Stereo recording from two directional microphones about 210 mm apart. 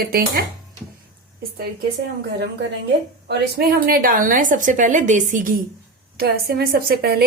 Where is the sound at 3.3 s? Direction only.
45° right (ahead or behind).